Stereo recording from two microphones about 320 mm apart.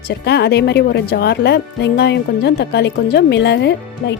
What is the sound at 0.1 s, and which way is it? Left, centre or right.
Speech, left.